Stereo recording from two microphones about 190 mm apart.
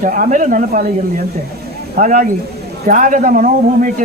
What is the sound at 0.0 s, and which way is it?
Speech, 45° right (ahead or behind).